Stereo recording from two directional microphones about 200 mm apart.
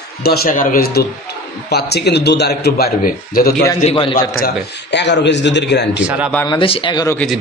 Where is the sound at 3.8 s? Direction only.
30° left (ahead or behind).